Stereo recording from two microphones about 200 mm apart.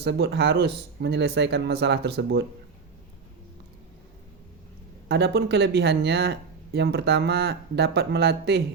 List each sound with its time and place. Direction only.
0.0 s speech: 55° right (ahead or behind)
5.0 s speech: 55° right (ahead or behind)